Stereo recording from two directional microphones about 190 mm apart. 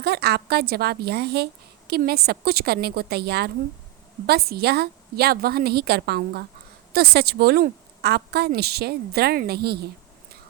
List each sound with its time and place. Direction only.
0.0 s a woman's voice: 60° right (ahead or behind)